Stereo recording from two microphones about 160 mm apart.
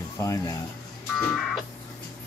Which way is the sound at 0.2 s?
20° left (ahead or behind).